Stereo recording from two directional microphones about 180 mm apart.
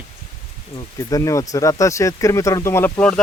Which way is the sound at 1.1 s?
20° left (ahead or behind).